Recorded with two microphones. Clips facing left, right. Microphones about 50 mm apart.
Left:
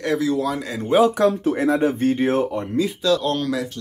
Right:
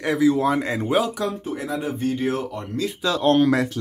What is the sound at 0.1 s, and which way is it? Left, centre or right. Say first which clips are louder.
Speech: right 3 dB; centre.